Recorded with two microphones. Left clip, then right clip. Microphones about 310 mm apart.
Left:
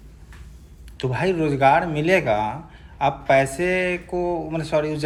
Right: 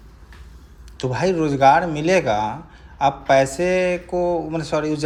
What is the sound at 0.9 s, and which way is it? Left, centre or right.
Speech, centre.